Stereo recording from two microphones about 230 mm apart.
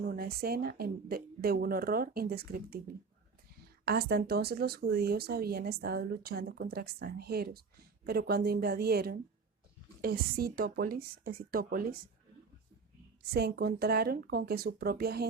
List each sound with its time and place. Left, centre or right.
0.0 s a woman's voice: right
13.3 s a woman's voice: right